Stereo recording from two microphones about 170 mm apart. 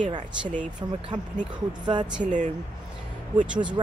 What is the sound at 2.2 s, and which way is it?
Speech, 45° right (ahead or behind).